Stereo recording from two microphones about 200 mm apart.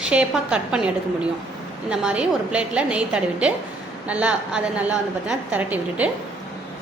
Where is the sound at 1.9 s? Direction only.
5° right (ahead or behind).